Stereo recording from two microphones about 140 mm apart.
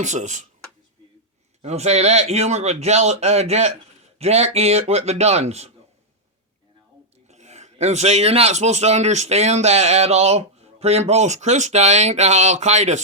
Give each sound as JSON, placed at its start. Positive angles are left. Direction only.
{"t": 0.0, "sound": "speech", "side_deg": -60}
{"t": 1.6, "sound": "speech", "side_deg": -50}
{"t": 7.3, "sound": "speech", "side_deg": -55}